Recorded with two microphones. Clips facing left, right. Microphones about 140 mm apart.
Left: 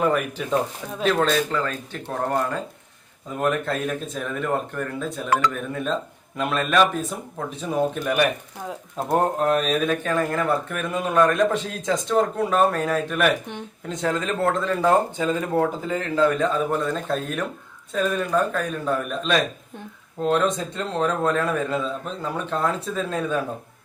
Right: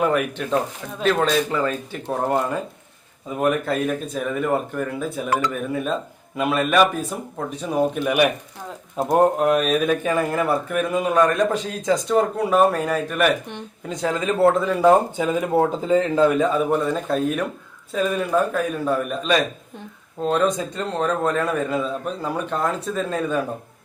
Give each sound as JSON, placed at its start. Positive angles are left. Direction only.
{"t": 0.0, "sound": "speech", "side_deg": 0}
{"t": 1.5, "sound": "speech", "side_deg": -10}